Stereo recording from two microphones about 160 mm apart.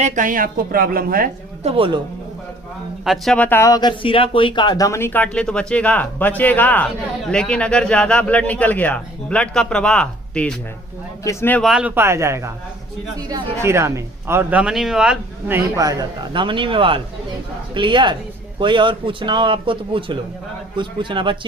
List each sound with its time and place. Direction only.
0.0 s a woman's voice: 55° right (ahead or behind)
1.6 s speech: 35° right (ahead or behind)
3.0 s speech: centre (ahead or behind)
11.2 s speech: 20° left (ahead or behind)
11.6 s speech: 5° right (ahead or behind); by 21.3 s 30° right (ahead or behind)